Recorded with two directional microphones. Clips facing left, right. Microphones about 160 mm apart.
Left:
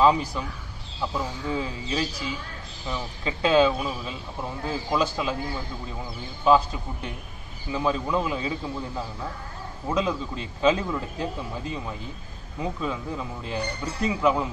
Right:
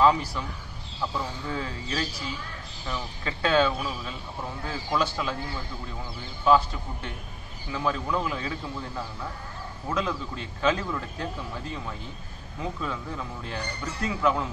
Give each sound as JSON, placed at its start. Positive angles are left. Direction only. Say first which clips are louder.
{"t": 0.0, "sound": "a man's voice", "louder": "left 1 dB", "side_deg": 20}
{"t": 6.4, "sound": "a man's voice", "louder": "left 2 dB", "side_deg": 15}